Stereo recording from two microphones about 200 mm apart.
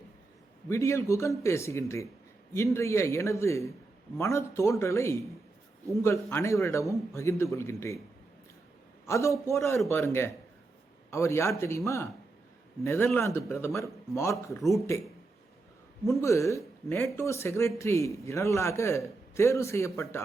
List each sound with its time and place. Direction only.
0.7 s a man's voice: 15° left (ahead or behind)
9.0 s a man's voice: 15° left (ahead or behind)
12.8 s a man's voice: 15° left (ahead or behind)
16.0 s a man's voice: 15° left (ahead or behind)